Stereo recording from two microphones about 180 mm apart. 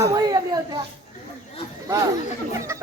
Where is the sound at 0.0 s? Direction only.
20° right (ahead or behind).